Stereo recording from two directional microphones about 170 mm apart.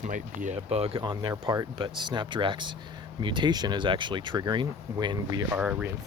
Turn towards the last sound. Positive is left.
turn(degrees=-5)  # may be behind; listen again after turning